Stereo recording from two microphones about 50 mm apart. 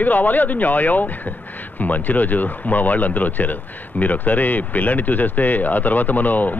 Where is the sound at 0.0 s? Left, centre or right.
Left.